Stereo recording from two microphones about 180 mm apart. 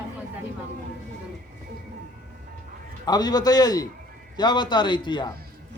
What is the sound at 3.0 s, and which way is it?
A man's voice, 20° left (ahead or behind).